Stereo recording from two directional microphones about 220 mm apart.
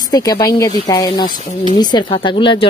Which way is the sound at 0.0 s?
15° left (ahead or behind).